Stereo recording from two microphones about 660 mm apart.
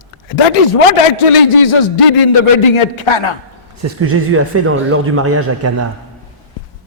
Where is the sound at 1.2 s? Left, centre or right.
Left.